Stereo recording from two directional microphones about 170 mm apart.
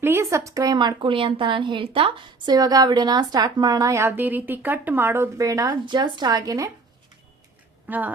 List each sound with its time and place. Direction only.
0.0 s speech: 15° right (ahead or behind)
7.9 s speech: 10° right (ahead or behind)